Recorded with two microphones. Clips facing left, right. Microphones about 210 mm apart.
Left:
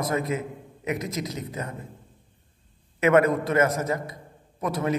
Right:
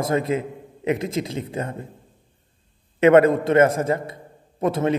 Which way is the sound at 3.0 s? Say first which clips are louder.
Right 6 dB; 30° right (ahead or behind).